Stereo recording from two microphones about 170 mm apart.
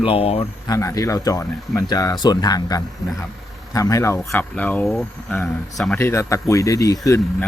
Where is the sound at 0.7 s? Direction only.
20° left (ahead or behind).